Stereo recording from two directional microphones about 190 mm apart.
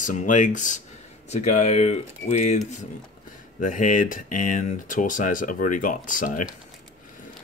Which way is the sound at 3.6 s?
45° left (ahead or behind).